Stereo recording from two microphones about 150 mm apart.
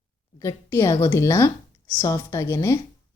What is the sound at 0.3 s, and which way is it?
A woman's voice, 20° left (ahead or behind).